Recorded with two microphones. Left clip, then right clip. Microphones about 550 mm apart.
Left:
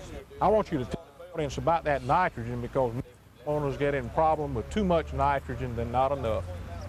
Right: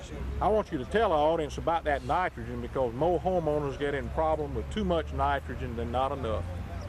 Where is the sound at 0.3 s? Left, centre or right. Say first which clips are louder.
Left 3 dB; left.